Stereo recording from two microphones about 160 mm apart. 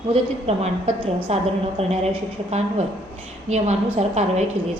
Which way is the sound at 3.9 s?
45° right (ahead or behind).